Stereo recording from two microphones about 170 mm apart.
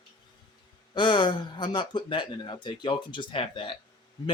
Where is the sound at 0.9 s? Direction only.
25° left (ahead or behind).